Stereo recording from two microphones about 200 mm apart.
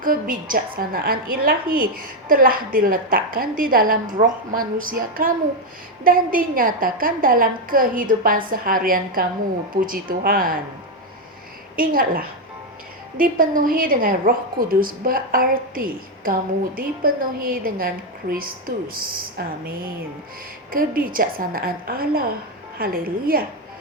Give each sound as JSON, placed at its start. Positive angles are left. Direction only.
{"t": 0.0, "sound": "a woman's voice", "side_deg": -45}
{"t": 11.8, "sound": "a woman's voice", "side_deg": -45}